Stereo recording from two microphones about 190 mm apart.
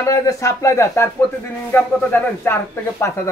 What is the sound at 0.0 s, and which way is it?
A woman's voice, 15° left (ahead or behind).